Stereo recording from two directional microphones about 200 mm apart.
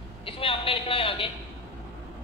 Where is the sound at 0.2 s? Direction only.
25° left (ahead or behind).